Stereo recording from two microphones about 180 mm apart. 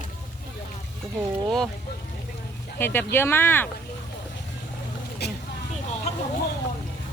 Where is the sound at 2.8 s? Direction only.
10° left (ahead or behind).